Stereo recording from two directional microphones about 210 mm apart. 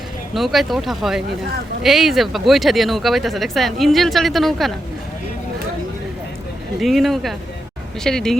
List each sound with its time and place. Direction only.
0.3 s speech: centre (ahead or behind)
6.7 s speech: centre (ahead or behind)